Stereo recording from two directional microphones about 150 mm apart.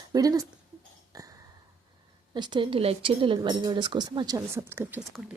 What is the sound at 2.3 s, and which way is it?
A woman's voice, 30° right (ahead or behind).